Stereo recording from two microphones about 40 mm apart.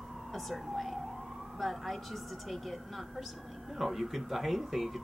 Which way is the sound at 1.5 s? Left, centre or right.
Centre.